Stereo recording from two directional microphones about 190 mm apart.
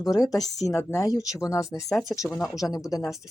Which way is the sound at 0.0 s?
20° left (ahead or behind).